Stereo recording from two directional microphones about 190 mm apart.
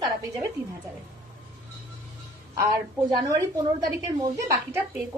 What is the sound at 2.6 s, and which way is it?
A woman's voice, 20° right (ahead or behind).